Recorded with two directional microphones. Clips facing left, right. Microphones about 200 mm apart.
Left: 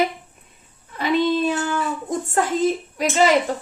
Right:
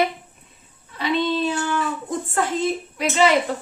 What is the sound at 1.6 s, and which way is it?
Speech, 45° left (ahead or behind).